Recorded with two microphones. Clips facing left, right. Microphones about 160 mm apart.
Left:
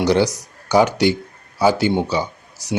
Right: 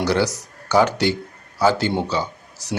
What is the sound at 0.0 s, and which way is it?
Speech, 15° left (ahead or behind).